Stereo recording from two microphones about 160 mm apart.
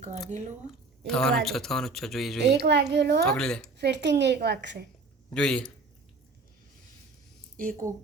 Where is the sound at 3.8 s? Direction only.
90° right.